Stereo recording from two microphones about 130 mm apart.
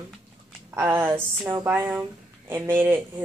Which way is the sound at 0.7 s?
15° right (ahead or behind).